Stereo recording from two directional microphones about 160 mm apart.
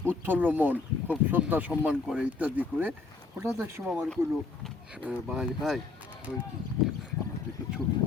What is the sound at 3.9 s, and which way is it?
Speech, centre (ahead or behind).